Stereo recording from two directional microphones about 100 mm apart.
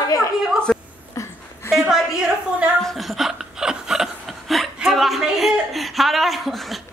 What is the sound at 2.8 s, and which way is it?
Chuckle, centre (ahead or behind).